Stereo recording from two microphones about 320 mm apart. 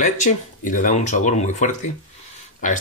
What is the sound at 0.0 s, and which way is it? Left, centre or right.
Speech, left.